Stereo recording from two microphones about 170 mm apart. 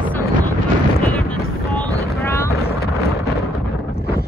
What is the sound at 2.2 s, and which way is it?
Vehicle, 15° left (ahead or behind).